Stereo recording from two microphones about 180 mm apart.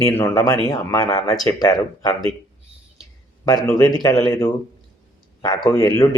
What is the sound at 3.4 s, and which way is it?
A man's voice, 20° left (ahead or behind).